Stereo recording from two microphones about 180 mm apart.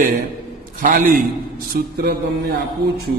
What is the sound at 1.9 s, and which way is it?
Music, 60° right (ahead or behind).